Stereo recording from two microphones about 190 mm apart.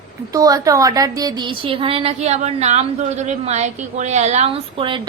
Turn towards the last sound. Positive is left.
turn(degrees=-25)  # may be behind; listen again after turning